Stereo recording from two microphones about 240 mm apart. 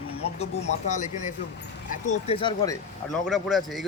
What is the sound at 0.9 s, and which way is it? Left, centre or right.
Speech, left.